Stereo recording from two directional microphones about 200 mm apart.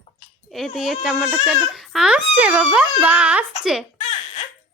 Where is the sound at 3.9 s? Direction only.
30° left (ahead or behind).